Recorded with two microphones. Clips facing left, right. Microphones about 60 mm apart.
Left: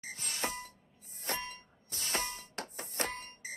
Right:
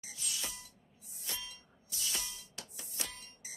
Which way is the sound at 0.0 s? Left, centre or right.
Left.